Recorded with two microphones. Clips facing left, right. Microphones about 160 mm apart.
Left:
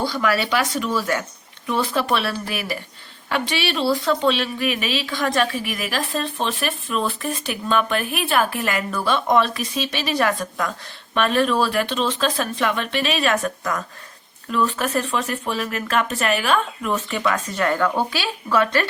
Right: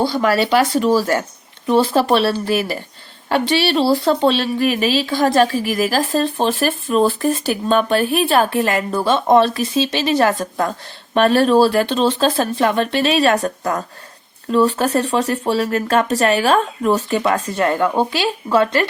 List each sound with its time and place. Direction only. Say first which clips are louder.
0.0 s speech: right 5 dB; 30° right (ahead or behind)